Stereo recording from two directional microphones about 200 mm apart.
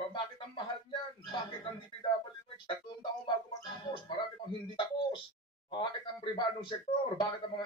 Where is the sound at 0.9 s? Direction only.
25° left (ahead or behind).